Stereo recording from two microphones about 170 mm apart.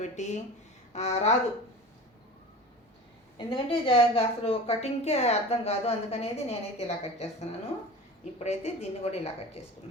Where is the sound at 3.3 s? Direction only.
30° left (ahead or behind).